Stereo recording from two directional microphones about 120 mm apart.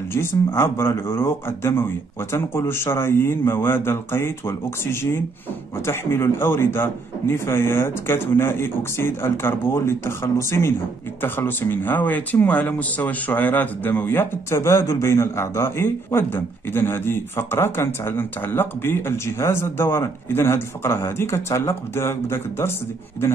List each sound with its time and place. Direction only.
0.1 s a man's voice: 20° left (ahead or behind)